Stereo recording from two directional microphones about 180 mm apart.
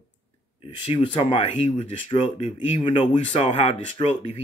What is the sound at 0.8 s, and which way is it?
Speech, 25° left (ahead or behind).